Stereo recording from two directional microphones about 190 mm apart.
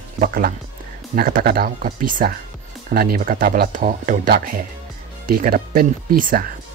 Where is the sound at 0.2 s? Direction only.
50° right (ahead or behind).